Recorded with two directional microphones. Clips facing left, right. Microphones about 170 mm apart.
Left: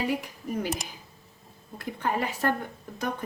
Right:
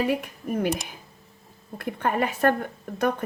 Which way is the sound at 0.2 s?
55° right (ahead or behind).